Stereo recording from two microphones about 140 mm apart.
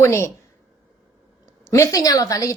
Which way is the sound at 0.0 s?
20° left (ahead or behind).